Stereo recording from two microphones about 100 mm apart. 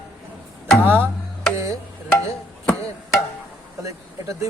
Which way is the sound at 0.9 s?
20° right (ahead or behind).